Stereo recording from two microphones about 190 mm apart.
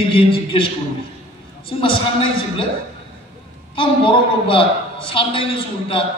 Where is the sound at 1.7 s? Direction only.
25° left (ahead or behind).